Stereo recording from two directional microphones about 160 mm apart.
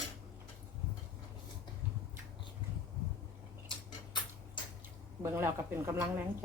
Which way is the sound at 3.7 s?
30° left (ahead or behind).